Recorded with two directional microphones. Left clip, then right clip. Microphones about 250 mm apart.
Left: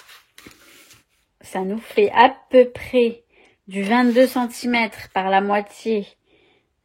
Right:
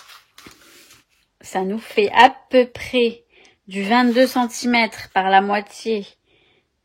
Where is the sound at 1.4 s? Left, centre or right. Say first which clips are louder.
Right 2 dB; centre.